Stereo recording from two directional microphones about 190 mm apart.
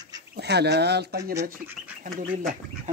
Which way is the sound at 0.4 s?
60° right (ahead or behind).